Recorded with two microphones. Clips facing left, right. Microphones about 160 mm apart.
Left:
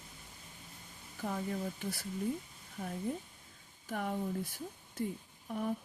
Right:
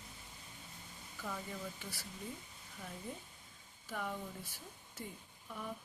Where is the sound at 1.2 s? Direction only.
45° left (ahead or behind).